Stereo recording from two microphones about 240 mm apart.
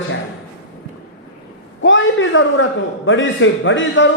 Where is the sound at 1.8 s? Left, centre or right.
Left.